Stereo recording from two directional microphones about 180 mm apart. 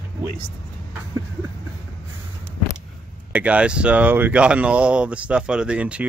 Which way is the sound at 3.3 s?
5° right (ahead or behind).